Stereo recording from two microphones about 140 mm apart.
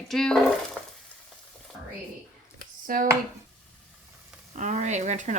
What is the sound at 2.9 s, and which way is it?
Speech, 90° right.